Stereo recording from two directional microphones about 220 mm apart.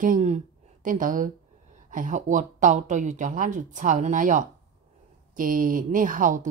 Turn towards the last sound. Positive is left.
turn(degrees=-35)  # may be behind; listen again after turning